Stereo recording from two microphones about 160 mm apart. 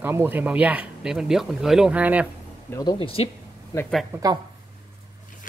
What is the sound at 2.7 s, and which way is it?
Speech, 20° left (ahead or behind).